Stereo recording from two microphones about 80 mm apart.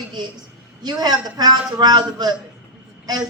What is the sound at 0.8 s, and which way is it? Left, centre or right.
Speech, right.